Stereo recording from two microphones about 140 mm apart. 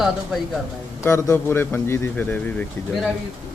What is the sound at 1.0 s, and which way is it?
A man's voice, 20° left (ahead or behind).